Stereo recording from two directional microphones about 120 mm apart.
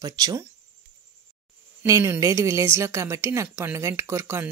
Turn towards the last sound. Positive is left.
turn(degrees=-20)  # may be behind; listen again after turning